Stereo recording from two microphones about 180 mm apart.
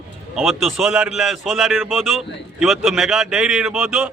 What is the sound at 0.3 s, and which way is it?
A man's voice, centre (ahead or behind).